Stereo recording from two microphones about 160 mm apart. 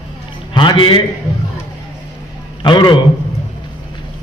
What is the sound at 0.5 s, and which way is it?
Speech, 30° left (ahead or behind).